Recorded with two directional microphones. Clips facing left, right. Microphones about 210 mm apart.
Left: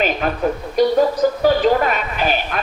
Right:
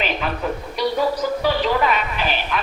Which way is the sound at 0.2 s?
45° left (ahead or behind).